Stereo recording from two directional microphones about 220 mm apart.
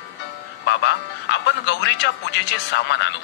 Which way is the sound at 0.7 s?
50° left (ahead or behind).